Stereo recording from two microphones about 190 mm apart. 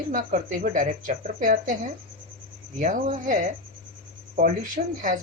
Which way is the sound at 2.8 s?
40° right (ahead or behind).